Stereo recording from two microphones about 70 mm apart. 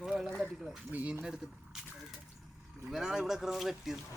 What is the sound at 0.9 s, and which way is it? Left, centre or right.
Speech, right.